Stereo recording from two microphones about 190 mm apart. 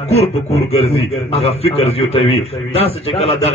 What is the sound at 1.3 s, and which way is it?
A man's voice, 30° left (ahead or behind).